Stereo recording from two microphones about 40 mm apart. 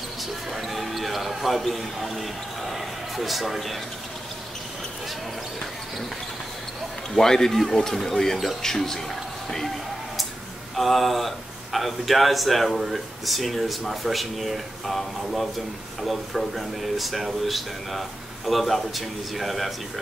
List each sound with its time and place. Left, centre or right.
0.5 s basketball bounce: centre
7.2 s speech: centre
10.8 s speech: centre